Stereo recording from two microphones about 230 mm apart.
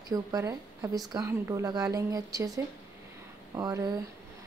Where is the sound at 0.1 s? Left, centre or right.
Centre.